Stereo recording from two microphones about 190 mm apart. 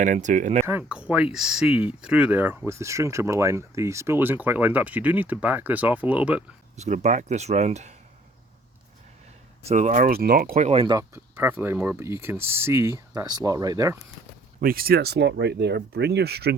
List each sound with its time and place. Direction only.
0.0 s speech: 40° right (ahead or behind)
0.7 s speech: 10° right (ahead or behind)
6.7 s speech: 40° right (ahead or behind)
9.6 s speech: 40° right (ahead or behind)
10.7 s speech: 25° right (ahead or behind)
14.6 s speech: 50° right (ahead or behind)